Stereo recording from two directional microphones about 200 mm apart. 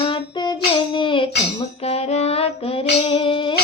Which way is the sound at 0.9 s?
25° left (ahead or behind).